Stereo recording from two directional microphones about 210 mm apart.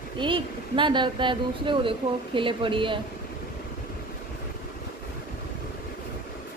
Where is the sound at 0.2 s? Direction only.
25° right (ahead or behind).